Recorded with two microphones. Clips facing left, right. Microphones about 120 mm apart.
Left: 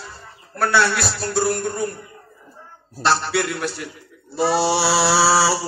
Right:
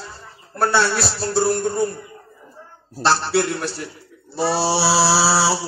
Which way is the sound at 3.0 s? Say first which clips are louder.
Right 1 dB; 35° right (ahead or behind).